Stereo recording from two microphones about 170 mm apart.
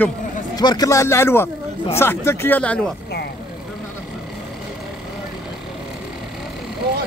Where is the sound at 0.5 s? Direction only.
25° left (ahead or behind); by 2.9 s 10° left (ahead or behind).